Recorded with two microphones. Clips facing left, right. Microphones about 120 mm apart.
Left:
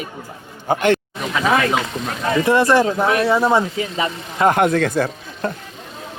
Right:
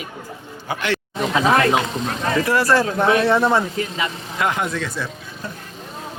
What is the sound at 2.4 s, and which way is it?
Speech, 20° left (ahead or behind).